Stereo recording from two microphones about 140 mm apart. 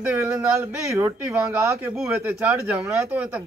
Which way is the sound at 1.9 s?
5° right (ahead or behind).